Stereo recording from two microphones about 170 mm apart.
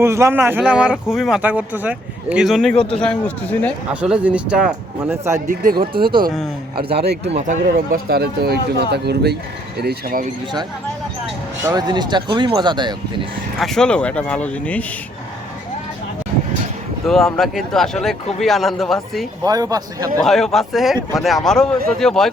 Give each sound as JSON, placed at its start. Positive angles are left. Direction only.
{"t": 0.0, "sound": "speech", "side_deg": -15}
{"t": 4.0, "sound": "speech", "side_deg": -5}
{"t": 5.7, "sound": "speech", "side_deg": -30}
{"t": 6.9, "sound": "speech", "side_deg": -70}
{"t": 7.3, "sound": "speech", "side_deg": -45}
{"t": 11.6, "sound": "speech", "side_deg": -25}
{"t": 13.6, "sound": "speech", "side_deg": 5}
{"t": 17.1, "sound": "speech", "side_deg": 5}
{"t": 19.5, "sound": "speech", "side_deg": -20}
{"t": 20.1, "sound": "speech", "side_deg": 0}